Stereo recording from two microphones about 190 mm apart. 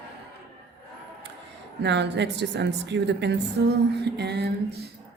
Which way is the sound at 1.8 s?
65° right (ahead or behind).